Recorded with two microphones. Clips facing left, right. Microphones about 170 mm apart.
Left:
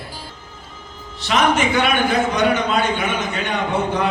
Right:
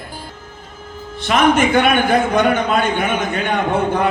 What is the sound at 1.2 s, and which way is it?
A man's voice, 50° right (ahead or behind).